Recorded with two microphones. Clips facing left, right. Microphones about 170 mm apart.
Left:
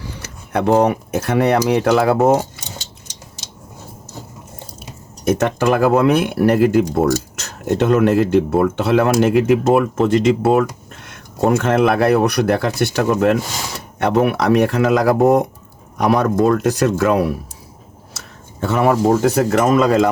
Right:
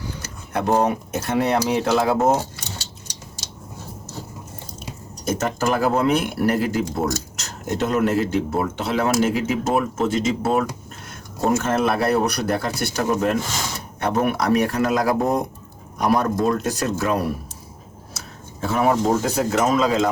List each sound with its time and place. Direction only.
0.2 s speech: 65° left (ahead or behind)
5.2 s speech: 65° left (ahead or behind)
18.6 s speech: 70° left (ahead or behind)